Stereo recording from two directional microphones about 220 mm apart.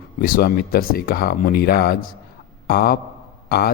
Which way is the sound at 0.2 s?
40° left (ahead or behind).